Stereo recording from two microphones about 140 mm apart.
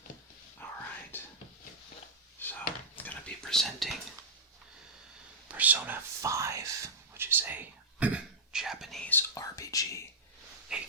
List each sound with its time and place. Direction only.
0.6 s whispering: 15° left (ahead or behind)
2.4 s whispering: 15° left (ahead or behind)
5.5 s speech: 10° right (ahead or behind)
9.0 s speech: 20° left (ahead or behind)
10.7 s a sound: 5° right (ahead or behind)